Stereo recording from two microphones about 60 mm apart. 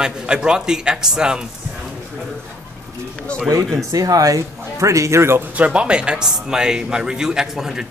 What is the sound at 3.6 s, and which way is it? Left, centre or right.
Speech, centre.